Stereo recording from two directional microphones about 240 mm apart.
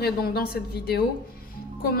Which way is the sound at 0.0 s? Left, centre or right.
Left.